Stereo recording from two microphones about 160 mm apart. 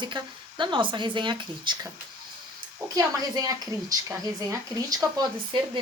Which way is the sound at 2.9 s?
25° right (ahead or behind).